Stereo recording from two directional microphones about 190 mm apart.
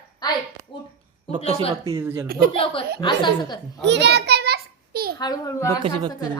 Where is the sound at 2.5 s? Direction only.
30° left (ahead or behind).